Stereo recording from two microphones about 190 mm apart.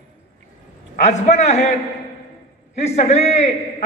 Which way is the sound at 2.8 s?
35° left (ahead or behind).